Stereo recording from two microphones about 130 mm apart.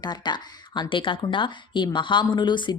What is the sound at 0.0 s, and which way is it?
Speech, 35° left (ahead or behind).